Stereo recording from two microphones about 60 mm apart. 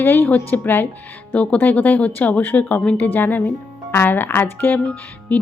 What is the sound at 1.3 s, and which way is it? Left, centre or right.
A woman's voice, left.